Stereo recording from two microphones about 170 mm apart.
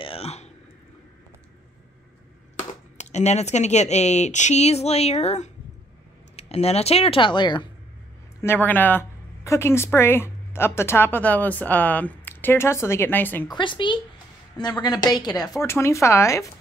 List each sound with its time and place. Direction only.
0.0 s a sound: 35° left (ahead or behind)
3.0 s speech: 40° left (ahead or behind)
8.4 s a woman's voice: 10° left (ahead or behind)
13.6 s a woman's voice: 30° left (ahead or behind)